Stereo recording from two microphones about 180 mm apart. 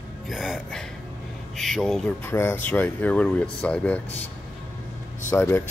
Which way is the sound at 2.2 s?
15° left (ahead or behind).